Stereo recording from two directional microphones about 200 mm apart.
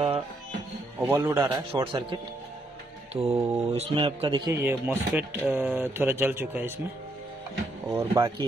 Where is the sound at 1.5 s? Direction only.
25° right (ahead or behind).